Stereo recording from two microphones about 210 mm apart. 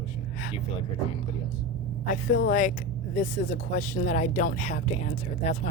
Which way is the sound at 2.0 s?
40° left (ahead or behind).